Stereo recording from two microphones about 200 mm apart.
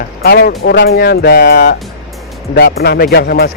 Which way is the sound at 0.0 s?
50° left (ahead or behind).